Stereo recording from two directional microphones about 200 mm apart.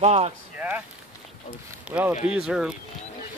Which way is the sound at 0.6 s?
5° right (ahead or behind).